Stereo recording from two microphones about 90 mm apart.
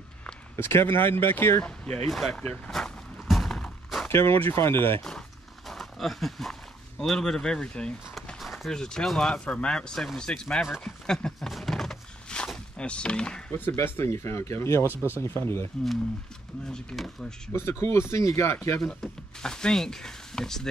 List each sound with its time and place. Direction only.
0.6 s speech: 25° left (ahead or behind)
1.6 s speech: 5° left (ahead or behind)
2.4 s speech: 15° left (ahead or behind)
2.7 s a sound: centre (ahead or behind)
4.4 s speech: 30° left (ahead or behind)
5.7 s a sound: centre (ahead or behind)
7.0 s speech: 5° left (ahead or behind)
8.1 s speech: centre (ahead or behind)
10.7 s a sound: 5° left (ahead or behind)
13.5 s speech: 25° left (ahead or behind)
16.6 s speech: 5° left (ahead or behind)
17.5 s speech: 30° left (ahead or behind)
18.8 s speech: 5° left (ahead or behind)